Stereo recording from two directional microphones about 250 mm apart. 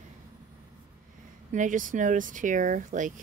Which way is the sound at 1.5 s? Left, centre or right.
Right.